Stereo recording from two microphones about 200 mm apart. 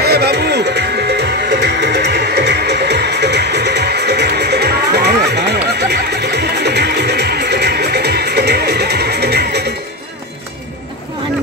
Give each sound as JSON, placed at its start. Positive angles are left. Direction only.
{"t": 0.0, "sound": "music", "side_deg": -55}